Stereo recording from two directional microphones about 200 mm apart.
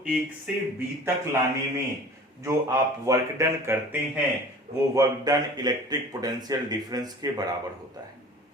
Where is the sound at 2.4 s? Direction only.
15° right (ahead or behind).